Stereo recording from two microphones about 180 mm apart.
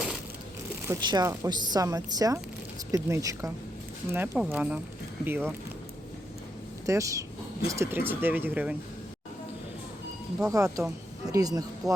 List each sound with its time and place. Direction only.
0.9 s speech: 20° right (ahead or behind)
6.8 s speech: 15° right (ahead or behind)
10.4 s speech: 15° right (ahead or behind)